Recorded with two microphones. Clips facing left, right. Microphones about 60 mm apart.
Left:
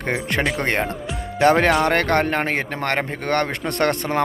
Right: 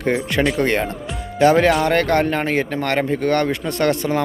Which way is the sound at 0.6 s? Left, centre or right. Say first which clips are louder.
Right 3 dB; left.